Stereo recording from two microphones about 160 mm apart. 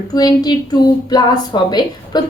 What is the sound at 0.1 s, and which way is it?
A woman's voice, 25° left (ahead or behind).